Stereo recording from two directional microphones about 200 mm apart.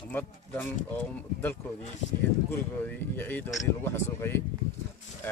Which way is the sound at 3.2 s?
10° left (ahead or behind).